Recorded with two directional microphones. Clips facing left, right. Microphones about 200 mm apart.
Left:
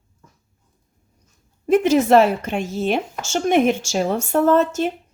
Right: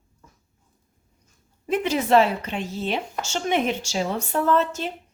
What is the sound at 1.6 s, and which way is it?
A woman's voice, 45° left (ahead or behind).